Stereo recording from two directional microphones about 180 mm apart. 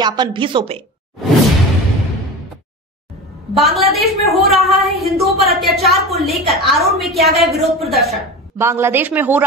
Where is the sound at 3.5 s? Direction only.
Centre (ahead or behind).